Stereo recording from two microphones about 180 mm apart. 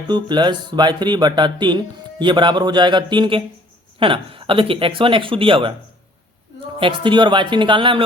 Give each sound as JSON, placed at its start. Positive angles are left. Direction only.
{"t": 0.1, "sound": "speech", "side_deg": -25}
{"t": 6.7, "sound": "speech", "side_deg": -30}